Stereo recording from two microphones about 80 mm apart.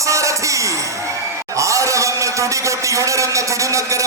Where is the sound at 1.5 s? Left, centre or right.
Right.